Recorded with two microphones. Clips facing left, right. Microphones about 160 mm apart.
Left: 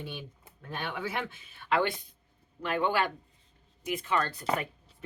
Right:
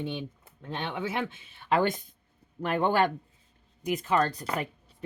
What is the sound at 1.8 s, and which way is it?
Speech, 45° right (ahead or behind).